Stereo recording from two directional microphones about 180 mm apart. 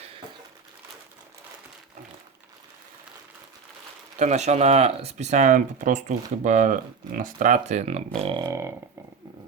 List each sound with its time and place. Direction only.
4.2 s speech: 40° right (ahead or behind); by 8.7 s 20° right (ahead or behind)